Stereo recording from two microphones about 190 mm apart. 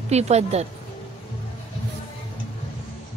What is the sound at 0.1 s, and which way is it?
Speech, 35° right (ahead or behind).